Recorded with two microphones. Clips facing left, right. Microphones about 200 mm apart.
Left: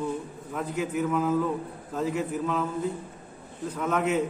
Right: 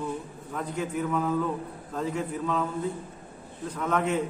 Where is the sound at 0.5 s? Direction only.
5° left (ahead or behind).